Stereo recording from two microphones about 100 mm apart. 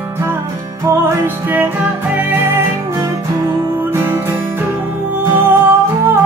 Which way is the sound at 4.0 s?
20° right (ahead or behind).